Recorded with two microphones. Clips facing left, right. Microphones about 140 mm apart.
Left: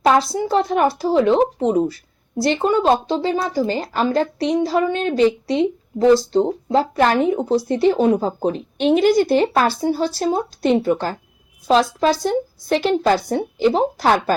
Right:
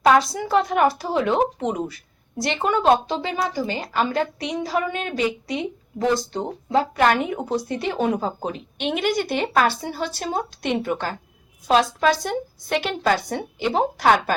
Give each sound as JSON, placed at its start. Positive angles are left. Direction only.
{"t": 0.1, "sound": "a woman's voice", "side_deg": 35}